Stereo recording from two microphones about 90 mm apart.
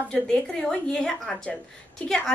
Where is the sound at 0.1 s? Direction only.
10° left (ahead or behind).